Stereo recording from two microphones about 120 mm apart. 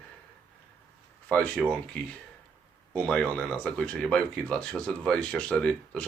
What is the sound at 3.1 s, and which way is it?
Speech, 10° left (ahead or behind).